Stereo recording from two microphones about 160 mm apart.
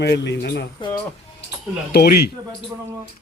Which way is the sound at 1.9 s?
75° left (ahead or behind).